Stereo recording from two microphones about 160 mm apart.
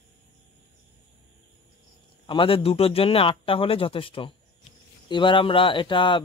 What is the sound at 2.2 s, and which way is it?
Speech, 35° left (ahead or behind).